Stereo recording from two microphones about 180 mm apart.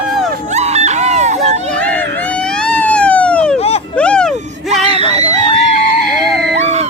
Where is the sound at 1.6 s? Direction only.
5° left (ahead or behind).